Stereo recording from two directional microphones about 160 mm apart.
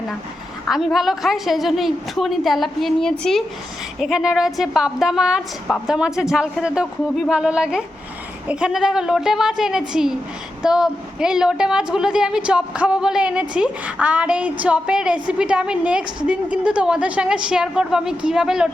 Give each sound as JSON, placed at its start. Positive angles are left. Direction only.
{"t": 0.7, "sound": "a woman's voice", "side_deg": 0}